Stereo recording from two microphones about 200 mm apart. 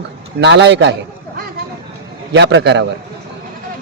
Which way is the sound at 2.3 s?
65° right (ahead or behind).